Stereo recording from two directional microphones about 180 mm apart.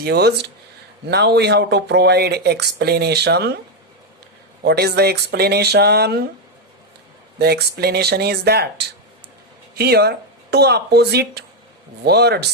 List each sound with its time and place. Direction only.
0.0 s speech: 65° right (ahead or behind)
4.6 s speech: 65° right (ahead or behind)
7.3 s speech: 60° right (ahead or behind)